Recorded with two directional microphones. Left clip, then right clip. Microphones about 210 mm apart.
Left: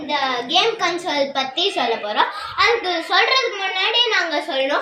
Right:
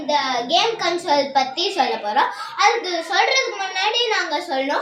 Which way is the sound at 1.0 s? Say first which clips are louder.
Right 3 dB; 10° right (ahead or behind).